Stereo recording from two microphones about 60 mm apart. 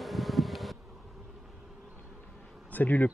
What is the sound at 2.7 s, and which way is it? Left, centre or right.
Speech, left.